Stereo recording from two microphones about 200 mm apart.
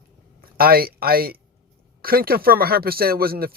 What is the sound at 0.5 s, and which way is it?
Speech, 50° right (ahead or behind).